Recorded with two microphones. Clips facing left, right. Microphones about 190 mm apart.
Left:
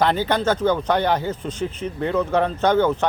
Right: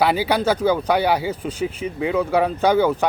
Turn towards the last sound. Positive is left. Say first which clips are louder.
# right 1 dB
turn(degrees=-10)  # may be behind; listen again after turning